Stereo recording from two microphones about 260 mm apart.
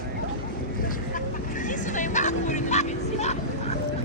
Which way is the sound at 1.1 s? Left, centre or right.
Left.